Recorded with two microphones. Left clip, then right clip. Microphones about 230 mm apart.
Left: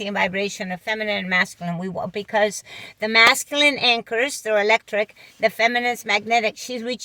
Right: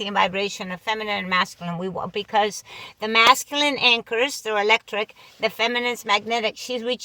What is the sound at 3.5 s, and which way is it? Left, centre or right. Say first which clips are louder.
Speech: left 1 dB; centre.